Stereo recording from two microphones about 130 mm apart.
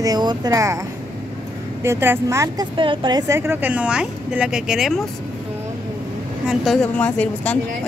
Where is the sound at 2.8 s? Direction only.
40° right (ahead or behind); by 5.0 s 5° right (ahead or behind).